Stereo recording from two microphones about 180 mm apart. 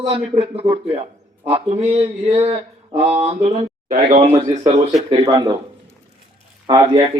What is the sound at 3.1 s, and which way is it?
Speech, 35° right (ahead or behind).